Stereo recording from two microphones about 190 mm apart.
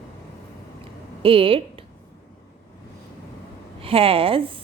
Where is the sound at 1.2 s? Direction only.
30° right (ahead or behind).